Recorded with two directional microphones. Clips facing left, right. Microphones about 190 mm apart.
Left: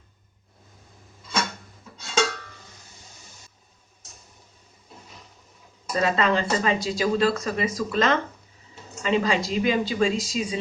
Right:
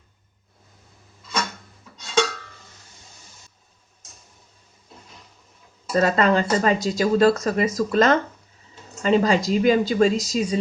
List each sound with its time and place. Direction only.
5.9 s speech: 45° right (ahead or behind)